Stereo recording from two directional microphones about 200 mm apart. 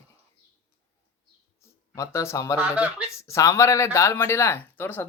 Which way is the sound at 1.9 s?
15° left (ahead or behind).